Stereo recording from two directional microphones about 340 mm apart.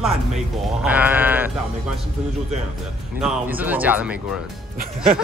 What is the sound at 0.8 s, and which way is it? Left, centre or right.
Speech, centre.